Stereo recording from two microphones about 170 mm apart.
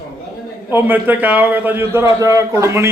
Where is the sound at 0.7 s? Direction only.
10° right (ahead or behind).